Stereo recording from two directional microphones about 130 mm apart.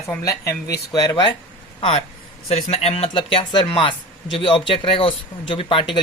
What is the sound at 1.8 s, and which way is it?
Speech, 45° left (ahead or behind).